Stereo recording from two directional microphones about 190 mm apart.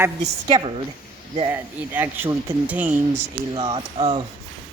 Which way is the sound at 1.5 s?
10° right (ahead or behind).